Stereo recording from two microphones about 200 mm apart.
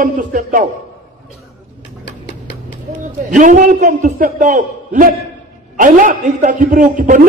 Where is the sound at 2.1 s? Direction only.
60° left (ahead or behind).